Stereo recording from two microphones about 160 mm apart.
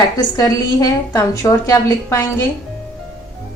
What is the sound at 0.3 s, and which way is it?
A woman's voice, 20° left (ahead or behind).